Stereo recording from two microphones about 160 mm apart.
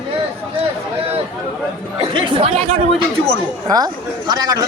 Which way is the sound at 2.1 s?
30° right (ahead or behind).